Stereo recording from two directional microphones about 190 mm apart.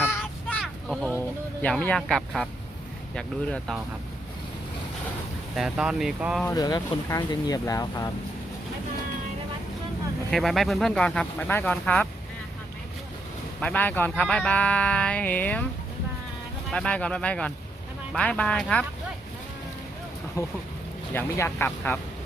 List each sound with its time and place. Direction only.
0.0 s a sound: 10° left (ahead or behind)
1.6 s speech: 5° left (ahead or behind)
5.5 s speech: 5° right (ahead or behind)
6.4 s speech: 20° left (ahead or behind)
10.3 s speech: centre (ahead or behind)
13.6 s speech: 5° left (ahead or behind)
16.7 s speech: 5° left (ahead or behind)
21.1 s speech: 10° left (ahead or behind)